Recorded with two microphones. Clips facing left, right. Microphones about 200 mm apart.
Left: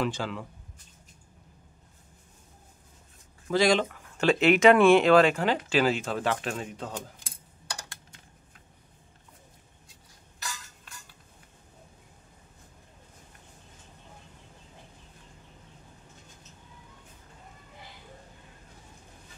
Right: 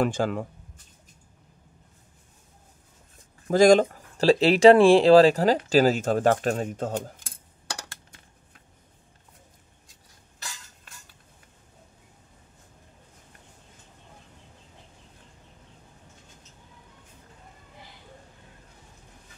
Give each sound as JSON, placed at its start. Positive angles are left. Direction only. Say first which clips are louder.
{"t": 0.0, "sound": "speech", "louder": "right 6 dB", "side_deg": -50}
{"t": 3.4, "sound": "speech", "louder": "right 7 dB", "side_deg": -45}